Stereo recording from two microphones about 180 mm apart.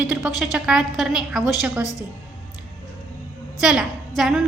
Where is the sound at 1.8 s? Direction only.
20° left (ahead or behind).